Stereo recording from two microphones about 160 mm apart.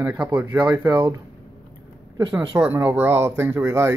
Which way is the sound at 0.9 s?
25° right (ahead or behind).